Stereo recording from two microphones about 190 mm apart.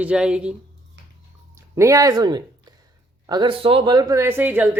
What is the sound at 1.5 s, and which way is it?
Speech, 15° right (ahead or behind).